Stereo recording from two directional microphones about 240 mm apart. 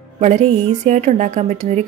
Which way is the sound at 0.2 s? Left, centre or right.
Right.